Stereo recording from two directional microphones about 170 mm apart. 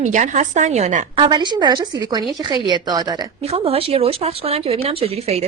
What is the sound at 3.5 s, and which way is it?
Speech, 35° right (ahead or behind).